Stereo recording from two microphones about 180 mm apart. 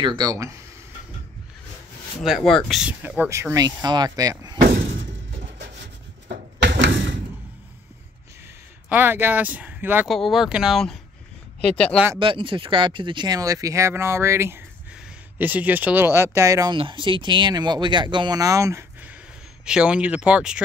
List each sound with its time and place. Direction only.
0.0 s speech: 25° right (ahead or behind)
2.2 s speech: centre (ahead or behind); by 4.6 s 20° right (ahead or behind)
6.6 s door: 75° right (ahead or behind)
8.8 s speech: 10° right (ahead or behind)
10.0 s speech: centre (ahead or behind)
12.2 s speech: 30° right (ahead or behind)
16.7 s speech: 30° right (ahead or behind)
19.6 s speech: 5° right (ahead or behind)